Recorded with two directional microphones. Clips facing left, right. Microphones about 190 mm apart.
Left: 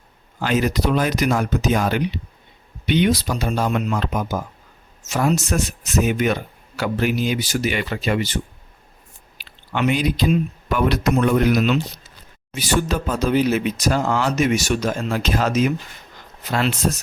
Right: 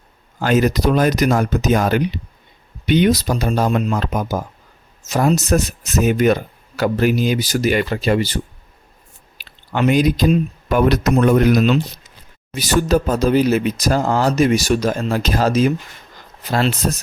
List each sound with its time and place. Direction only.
0.3 s speech: 45° right (ahead or behind)
9.4 s speech: 40° right (ahead or behind)